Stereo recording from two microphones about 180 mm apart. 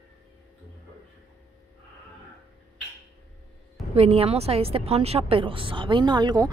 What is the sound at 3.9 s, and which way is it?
A woman's voice, 35° right (ahead or behind).